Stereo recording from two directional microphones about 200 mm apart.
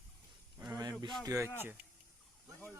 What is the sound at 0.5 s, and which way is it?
Speech, 15° right (ahead or behind).